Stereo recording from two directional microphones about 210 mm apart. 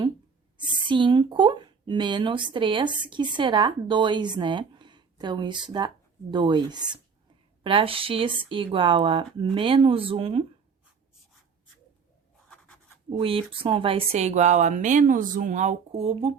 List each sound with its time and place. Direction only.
0.5 s speech: 25° right (ahead or behind)
12.5 s writing: 5° left (ahead or behind)
13.1 s speech: 25° right (ahead or behind)